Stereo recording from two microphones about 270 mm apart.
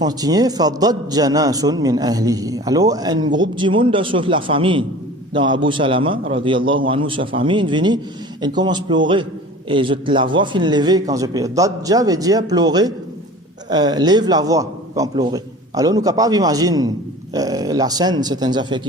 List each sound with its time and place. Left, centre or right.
0.0 s a man's voice: centre